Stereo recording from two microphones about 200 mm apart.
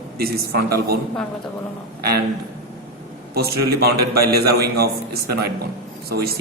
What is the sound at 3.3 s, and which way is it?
A man's voice, 50° right (ahead or behind).